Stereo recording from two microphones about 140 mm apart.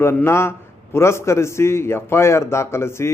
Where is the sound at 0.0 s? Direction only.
15° left (ahead or behind).